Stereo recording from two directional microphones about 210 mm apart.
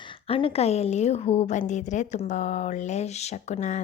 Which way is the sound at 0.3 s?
25° left (ahead or behind).